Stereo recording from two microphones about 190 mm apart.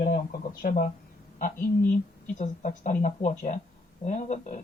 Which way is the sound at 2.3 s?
40° left (ahead or behind).